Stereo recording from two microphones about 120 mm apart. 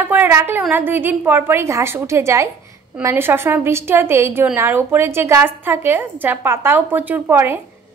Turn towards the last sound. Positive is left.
turn(degrees=-20)  # may be behind; listen again after turning